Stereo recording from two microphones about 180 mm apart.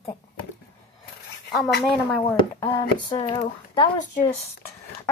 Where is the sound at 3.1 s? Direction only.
25° left (ahead or behind).